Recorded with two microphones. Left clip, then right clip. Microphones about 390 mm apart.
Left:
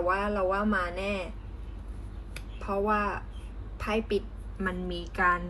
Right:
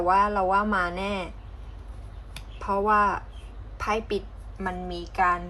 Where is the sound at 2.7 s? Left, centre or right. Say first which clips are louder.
Right 6 dB; centre.